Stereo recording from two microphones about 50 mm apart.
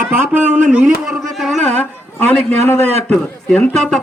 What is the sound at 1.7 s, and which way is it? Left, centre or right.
A man's voice, left.